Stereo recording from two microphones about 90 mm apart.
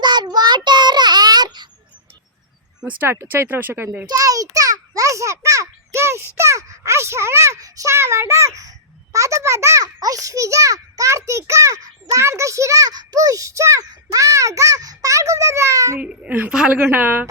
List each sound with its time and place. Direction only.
0.0 s child singing: 55° right (ahead or behind)
2.8 s speech: 25° right (ahead or behind)
4.1 s a child's voice: 40° right (ahead or behind)
16.0 s a child's voice: 15° right (ahead or behind)